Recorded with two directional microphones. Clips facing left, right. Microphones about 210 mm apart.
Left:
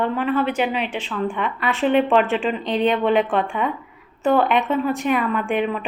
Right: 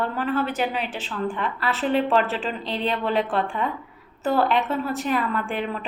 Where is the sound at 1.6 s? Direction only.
15° left (ahead or behind).